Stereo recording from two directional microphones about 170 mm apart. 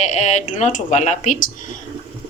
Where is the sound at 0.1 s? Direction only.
45° left (ahead or behind).